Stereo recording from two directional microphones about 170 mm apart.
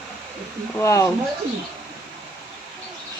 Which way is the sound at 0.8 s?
15° left (ahead or behind).